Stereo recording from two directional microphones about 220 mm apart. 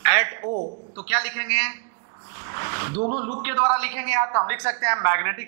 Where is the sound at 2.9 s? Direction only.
30° right (ahead or behind).